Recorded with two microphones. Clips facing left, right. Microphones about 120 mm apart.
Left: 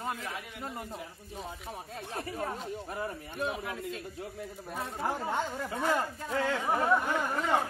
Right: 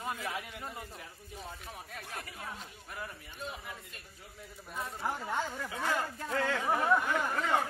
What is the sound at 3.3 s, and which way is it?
Speech, 75° left (ahead or behind).